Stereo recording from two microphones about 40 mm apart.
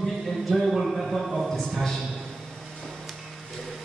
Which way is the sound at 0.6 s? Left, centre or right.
Centre.